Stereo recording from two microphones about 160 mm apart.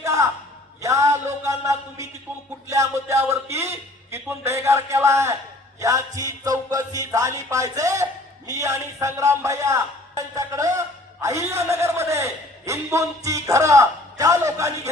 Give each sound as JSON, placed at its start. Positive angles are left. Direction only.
{"t": 0.0, "sound": "a sound", "side_deg": -20}
{"t": 2.6, "sound": "a man's voice", "side_deg": -20}
{"t": 5.8, "sound": "music", "side_deg": -20}
{"t": 8.4, "sound": "a man's voice", "side_deg": -20}